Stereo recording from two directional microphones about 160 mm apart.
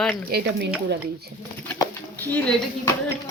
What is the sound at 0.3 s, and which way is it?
Speech, 80° right.